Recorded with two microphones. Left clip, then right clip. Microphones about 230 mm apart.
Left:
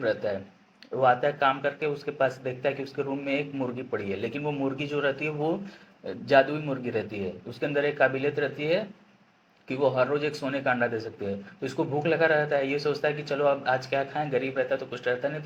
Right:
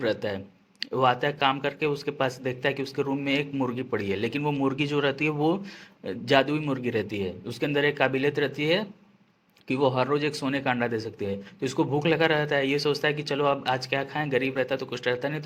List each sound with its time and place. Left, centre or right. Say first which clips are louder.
0.0 s a man's voice: even; right